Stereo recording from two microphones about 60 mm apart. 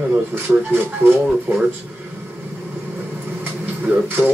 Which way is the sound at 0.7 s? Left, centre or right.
Right.